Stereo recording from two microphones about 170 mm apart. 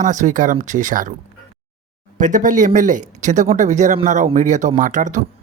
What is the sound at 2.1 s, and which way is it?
Speech, 50° right (ahead or behind).